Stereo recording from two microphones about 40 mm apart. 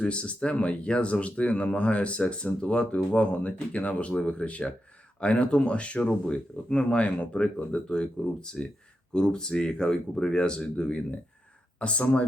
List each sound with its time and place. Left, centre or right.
0.0 s speech: left